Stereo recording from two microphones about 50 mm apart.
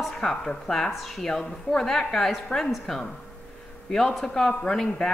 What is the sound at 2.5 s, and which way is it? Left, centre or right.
Speech, left.